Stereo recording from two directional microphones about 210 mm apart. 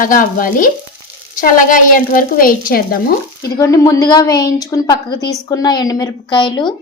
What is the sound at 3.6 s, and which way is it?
A woman's voice, 15° left (ahead or behind).